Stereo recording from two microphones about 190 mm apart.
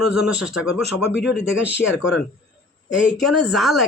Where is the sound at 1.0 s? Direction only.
65° left (ahead or behind).